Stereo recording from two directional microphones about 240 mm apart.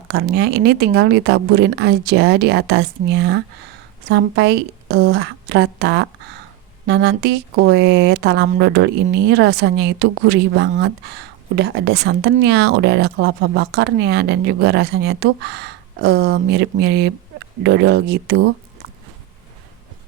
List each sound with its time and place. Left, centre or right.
0.1 s speech: right